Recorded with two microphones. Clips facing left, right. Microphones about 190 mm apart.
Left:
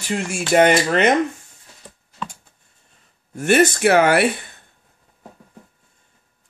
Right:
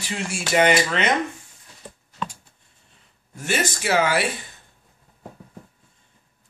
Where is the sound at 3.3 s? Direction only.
55° left (ahead or behind).